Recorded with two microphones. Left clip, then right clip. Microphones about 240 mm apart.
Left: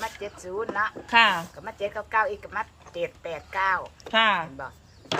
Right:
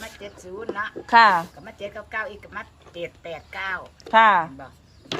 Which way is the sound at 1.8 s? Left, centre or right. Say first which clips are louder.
Left 5 dB; centre.